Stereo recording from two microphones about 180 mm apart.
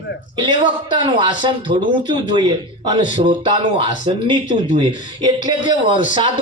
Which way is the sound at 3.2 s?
25° right (ahead or behind).